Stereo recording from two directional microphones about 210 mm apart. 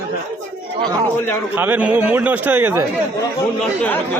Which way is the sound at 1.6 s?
10° right (ahead or behind).